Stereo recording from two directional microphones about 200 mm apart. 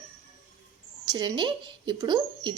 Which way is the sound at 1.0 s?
20° right (ahead or behind).